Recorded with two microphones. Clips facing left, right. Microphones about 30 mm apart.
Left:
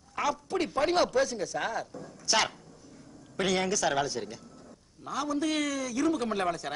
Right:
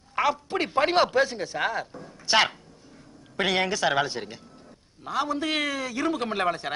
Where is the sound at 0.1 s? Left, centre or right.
Right.